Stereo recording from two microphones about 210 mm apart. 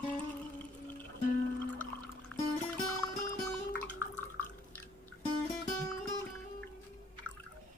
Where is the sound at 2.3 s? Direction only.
10° left (ahead or behind).